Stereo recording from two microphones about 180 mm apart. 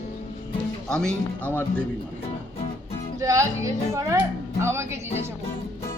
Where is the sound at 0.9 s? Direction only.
5° left (ahead or behind).